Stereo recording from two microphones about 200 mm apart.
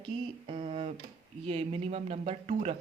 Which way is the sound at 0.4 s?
30° right (ahead or behind).